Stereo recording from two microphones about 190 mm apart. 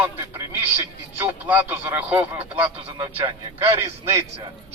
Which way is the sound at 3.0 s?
25° right (ahead or behind).